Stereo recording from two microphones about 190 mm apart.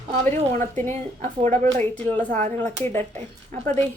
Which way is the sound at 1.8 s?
10° left (ahead or behind).